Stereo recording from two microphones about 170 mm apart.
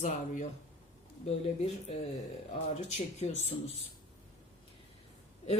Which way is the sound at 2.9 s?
40° left (ahead or behind).